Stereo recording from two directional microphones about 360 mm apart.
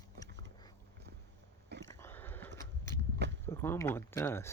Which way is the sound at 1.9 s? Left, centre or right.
Centre.